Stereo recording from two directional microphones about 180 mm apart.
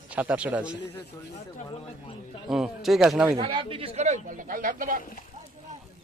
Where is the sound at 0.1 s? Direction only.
5° right (ahead or behind).